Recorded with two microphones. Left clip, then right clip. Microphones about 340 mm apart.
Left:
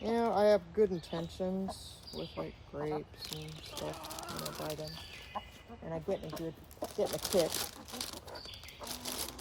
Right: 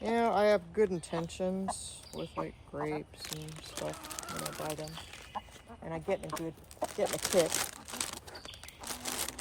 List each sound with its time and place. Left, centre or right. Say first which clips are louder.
0.0 s speech: right 1 dB; right
5.9 s speech: right 3 dB; centre
8.9 s a sound: right 3 dB; right